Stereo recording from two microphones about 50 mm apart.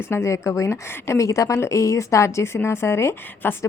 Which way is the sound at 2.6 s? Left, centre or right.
Left.